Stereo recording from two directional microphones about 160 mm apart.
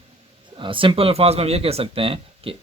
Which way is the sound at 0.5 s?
30° right (ahead or behind).